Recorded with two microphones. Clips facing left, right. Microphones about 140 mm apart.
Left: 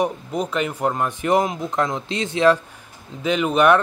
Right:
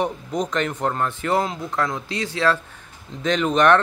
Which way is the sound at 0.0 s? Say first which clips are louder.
Left 1 dB; 5° left (ahead or behind).